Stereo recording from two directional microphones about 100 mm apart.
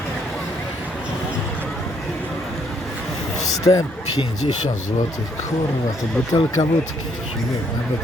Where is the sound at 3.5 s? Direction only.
35° left (ahead or behind).